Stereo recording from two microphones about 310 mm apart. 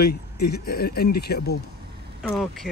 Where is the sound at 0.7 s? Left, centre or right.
Left.